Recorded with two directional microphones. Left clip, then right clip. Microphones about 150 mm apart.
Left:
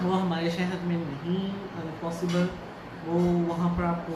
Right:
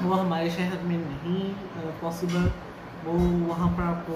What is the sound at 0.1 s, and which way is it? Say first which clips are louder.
Speech: right 4 dB; centre (ahead or behind).